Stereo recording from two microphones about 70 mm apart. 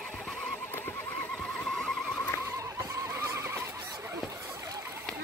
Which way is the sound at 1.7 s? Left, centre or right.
Centre.